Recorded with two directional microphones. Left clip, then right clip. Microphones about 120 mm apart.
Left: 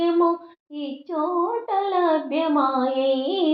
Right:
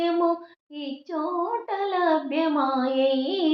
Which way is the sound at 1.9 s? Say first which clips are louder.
Even; 30° left (ahead or behind).